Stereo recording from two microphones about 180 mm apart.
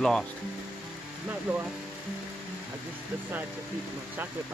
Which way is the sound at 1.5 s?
10° right (ahead or behind).